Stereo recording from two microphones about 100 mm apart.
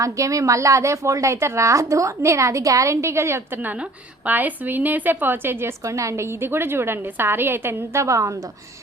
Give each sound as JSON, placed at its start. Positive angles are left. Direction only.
{"t": 0.0, "sound": "a woman's voice", "side_deg": -35}